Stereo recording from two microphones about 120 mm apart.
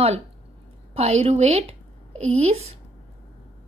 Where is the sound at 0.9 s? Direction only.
60° right (ahead or behind).